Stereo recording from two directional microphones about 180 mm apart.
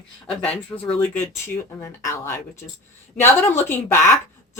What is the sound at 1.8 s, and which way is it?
Speech, 15° left (ahead or behind).